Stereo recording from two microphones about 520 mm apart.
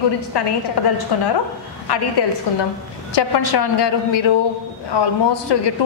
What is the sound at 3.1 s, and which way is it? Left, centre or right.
A woman's voice, left.